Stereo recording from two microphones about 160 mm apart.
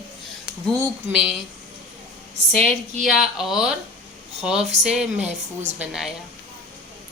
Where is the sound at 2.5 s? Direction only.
40° right (ahead or behind).